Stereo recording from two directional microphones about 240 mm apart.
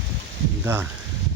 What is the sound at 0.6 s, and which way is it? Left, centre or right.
Speech, centre.